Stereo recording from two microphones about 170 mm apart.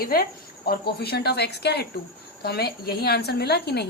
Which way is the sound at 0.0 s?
60° left (ahead or behind).